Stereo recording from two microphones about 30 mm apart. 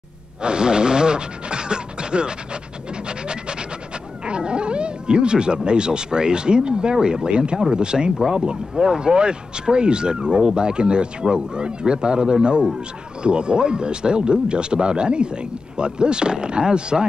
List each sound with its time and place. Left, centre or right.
0.4 s speech: right
3.1 s a sound: right
4.2 s speech: right
8.2 s speech: right